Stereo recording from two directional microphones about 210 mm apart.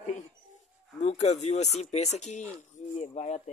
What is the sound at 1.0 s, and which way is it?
Speech, 30° left (ahead or behind).